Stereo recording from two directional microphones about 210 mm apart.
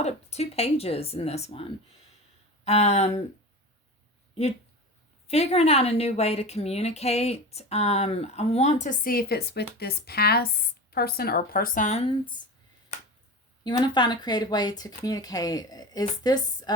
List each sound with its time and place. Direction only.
0.0 s speech: 30° left (ahead or behind)
2.6 s a woman's voice: 30° left (ahead or behind)
5.3 s a woman's voice: 30° left (ahead or behind)
12.0 s speech: 20° left (ahead or behind)
13.7 s speech: 20° left (ahead or behind)